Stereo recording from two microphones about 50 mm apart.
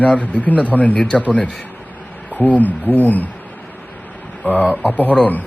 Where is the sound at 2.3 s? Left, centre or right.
Left.